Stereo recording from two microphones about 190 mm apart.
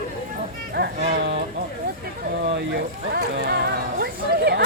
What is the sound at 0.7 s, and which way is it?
Speech, 60° right (ahead or behind).